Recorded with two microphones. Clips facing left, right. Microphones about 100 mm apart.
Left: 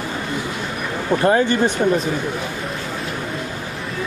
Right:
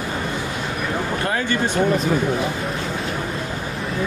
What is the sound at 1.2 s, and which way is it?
Speech, 25° left (ahead or behind).